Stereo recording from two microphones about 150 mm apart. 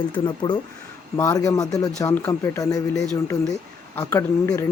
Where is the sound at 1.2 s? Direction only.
20° left (ahead or behind).